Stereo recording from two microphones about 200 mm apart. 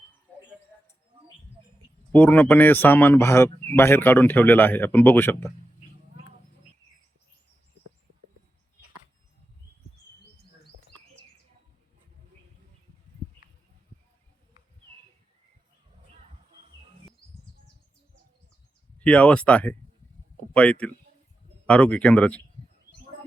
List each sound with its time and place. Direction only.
2.1 s speech: 5° left (ahead or behind)
16.5 s music: 30° right (ahead or behind)
18.9 s speech: 5° left (ahead or behind)